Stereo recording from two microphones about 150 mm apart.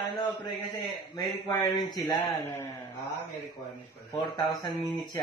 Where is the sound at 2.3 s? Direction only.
15° left (ahead or behind).